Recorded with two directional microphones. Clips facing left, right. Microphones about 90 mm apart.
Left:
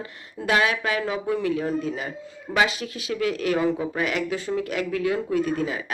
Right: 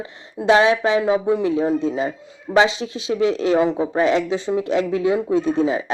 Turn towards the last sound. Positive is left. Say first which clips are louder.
# right 6 dB
turn(degrees=-25)  # may be behind; listen again after turning